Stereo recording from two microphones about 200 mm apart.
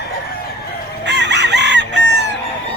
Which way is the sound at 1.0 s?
60° right (ahead or behind).